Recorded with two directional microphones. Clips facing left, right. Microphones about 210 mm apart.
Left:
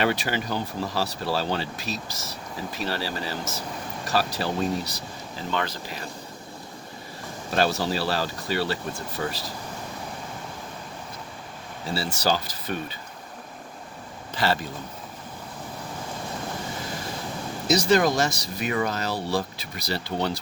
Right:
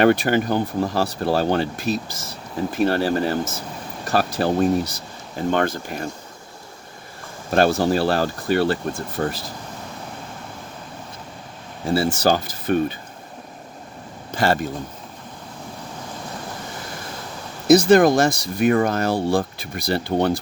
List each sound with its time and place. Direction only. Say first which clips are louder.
0.0 s speech: right 9 dB; 55° right (ahead or behind)
7.5 s speech: right 7 dB; 50° right (ahead or behind)
11.9 s speech: right 7 dB; 50° right (ahead or behind)
14.3 s speech: right 5 dB; 50° right (ahead or behind)
17.7 s speech: right 8 dB; 55° right (ahead or behind)